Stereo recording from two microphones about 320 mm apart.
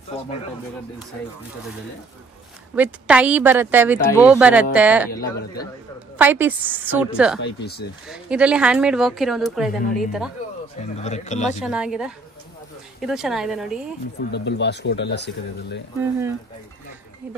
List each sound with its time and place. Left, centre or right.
2.7 s speech: centre
6.1 s speech: centre
7.3 s speech: left
8.1 s speech: centre
10.8 s a man's voice: left
11.6 s speech: centre
14.3 s speech: left